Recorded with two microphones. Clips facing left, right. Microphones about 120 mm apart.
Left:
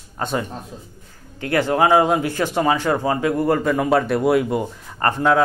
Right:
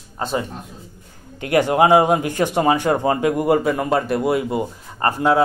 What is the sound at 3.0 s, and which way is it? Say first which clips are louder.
Speech: right 2 dB; 30° right (ahead or behind).